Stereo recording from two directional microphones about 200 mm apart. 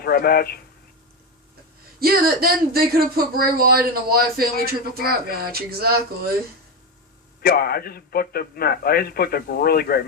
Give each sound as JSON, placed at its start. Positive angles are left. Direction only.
{"t": 0.0, "sound": "a man's voice", "side_deg": 50}
{"t": 2.0, "sound": "speech", "side_deg": -50}
{"t": 7.4, "sound": "a man's voice", "side_deg": 50}